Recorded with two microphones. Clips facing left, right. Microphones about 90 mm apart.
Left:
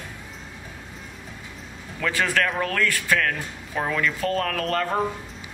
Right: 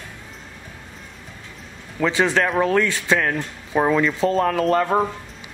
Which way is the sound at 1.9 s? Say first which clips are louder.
Right 5 dB; 20° right (ahead or behind).